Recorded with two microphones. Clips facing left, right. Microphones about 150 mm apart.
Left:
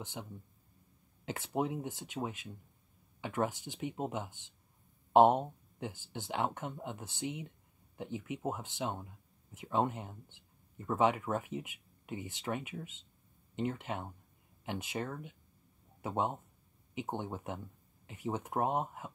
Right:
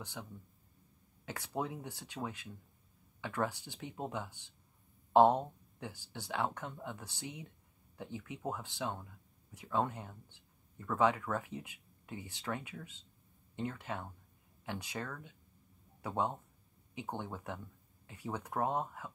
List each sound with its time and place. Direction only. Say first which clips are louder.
0.0 s speech: left 2 dB; 20° left (ahead or behind)